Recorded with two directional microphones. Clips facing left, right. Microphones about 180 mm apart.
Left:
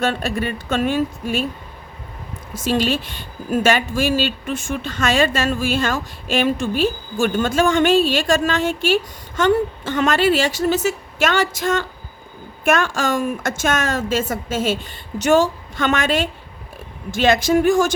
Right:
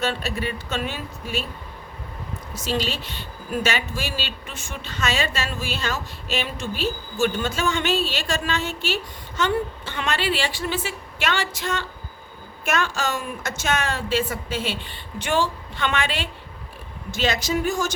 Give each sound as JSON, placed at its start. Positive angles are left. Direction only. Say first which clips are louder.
{"t": 0.0, "sound": "a woman's voice", "louder": "left 5 dB", "side_deg": 50}
{"t": 2.6, "sound": "a woman's voice", "louder": "left 7 dB", "side_deg": 50}